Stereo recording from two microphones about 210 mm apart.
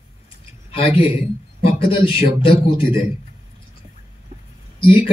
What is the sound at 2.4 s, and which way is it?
Speech, 25° left (ahead or behind).